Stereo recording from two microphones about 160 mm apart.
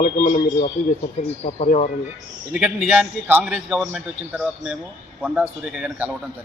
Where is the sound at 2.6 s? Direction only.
5° right (ahead or behind).